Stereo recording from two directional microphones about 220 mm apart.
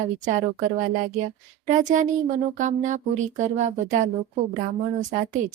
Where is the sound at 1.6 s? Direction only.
35° right (ahead or behind).